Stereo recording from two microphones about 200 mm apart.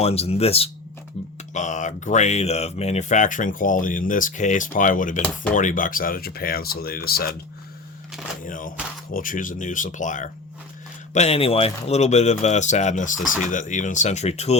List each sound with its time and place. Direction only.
0.0 s speech: 30° left (ahead or behind); by 7.3 s 50° left (ahead or behind)
8.4 s speech: 40° left (ahead or behind)